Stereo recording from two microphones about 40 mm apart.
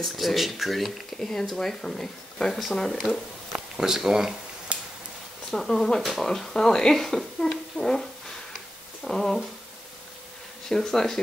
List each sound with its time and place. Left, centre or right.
0.0 s speech: centre
1.2 s speech: centre
3.5 s speech: centre
4.7 s finger snapping: right
5.5 s speech: centre
8.5 s a sound: centre
10.7 s speech: centre